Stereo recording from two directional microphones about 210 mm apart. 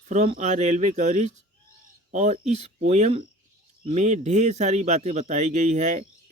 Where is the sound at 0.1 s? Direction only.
35° right (ahead or behind).